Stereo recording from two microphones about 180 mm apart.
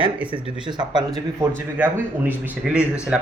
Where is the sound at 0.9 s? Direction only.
25° right (ahead or behind).